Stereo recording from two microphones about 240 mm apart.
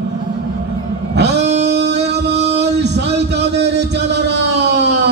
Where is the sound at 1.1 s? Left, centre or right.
Right.